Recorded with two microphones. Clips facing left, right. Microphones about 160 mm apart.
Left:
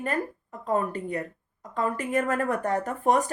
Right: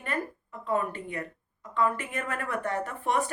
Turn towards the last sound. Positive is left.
turn(degrees=40)  # may be behind; listen again after turning